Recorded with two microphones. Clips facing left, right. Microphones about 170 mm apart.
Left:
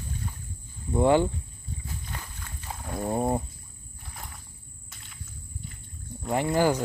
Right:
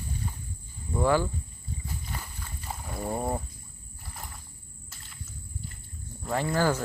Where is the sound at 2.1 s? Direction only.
10° right (ahead or behind).